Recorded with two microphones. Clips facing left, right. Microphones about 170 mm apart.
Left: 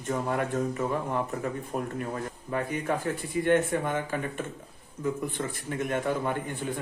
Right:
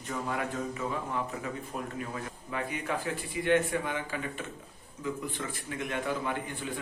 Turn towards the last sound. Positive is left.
turn(degrees=50)  # may be behind; listen again after turning